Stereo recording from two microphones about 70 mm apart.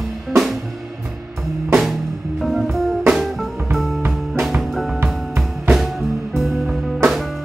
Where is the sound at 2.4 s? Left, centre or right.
Centre.